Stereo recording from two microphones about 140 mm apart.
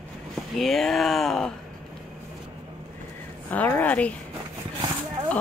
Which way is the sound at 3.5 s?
10° left (ahead or behind).